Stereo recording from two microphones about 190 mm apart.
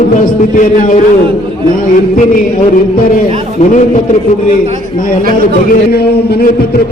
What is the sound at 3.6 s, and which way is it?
Speech, 35° left (ahead or behind).